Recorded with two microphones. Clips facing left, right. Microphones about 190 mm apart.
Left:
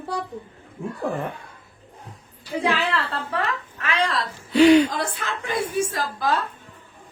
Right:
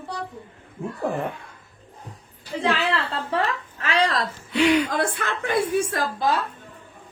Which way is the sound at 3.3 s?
30° right (ahead or behind).